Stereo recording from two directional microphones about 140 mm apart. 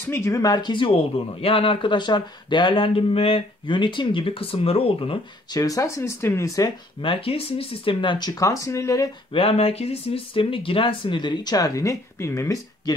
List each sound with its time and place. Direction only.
0.0 s speech: 20° left (ahead or behind); by 5.6 s 40° left (ahead or behind)
5.6 s speech: 25° left (ahead or behind)
7.0 s speech: 40° left (ahead or behind); by 9.1 s 20° left (ahead or behind)
9.3 s speech: 40° left (ahead or behind); by 12.9 s 25° left (ahead or behind)